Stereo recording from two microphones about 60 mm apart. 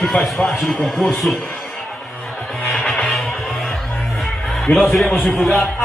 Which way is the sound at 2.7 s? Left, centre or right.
Centre.